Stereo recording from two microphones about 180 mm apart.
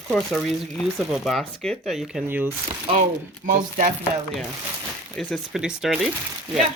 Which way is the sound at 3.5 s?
45° right (ahead or behind).